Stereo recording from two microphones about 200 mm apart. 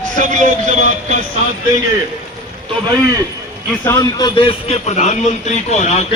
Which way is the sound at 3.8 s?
15° left (ahead or behind).